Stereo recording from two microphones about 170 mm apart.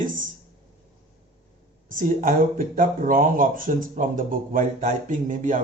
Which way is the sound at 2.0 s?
50° right (ahead or behind).